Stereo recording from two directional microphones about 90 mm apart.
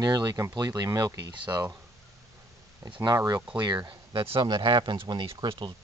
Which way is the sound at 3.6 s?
55° right (ahead or behind).